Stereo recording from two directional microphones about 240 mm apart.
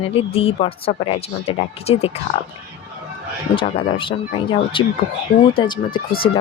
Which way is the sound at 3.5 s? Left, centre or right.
Left.